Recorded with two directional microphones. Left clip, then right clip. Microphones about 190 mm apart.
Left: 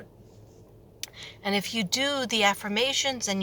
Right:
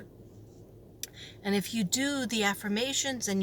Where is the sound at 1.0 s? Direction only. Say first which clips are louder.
Left 4 dB; 10° right (ahead or behind).